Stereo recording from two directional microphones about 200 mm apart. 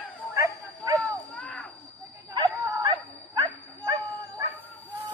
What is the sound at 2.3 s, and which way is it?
Dog, 20° right (ahead or behind).